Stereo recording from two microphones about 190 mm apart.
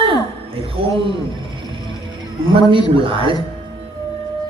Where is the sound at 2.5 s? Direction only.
25° right (ahead or behind).